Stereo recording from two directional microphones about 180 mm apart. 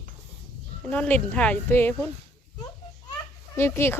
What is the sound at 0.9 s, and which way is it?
A woman's voice, 10° left (ahead or behind).